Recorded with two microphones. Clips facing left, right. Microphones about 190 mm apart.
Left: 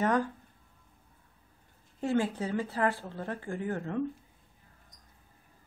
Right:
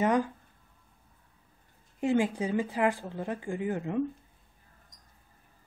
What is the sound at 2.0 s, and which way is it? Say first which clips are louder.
A woman's voice: right 2 dB; 15° right (ahead or behind).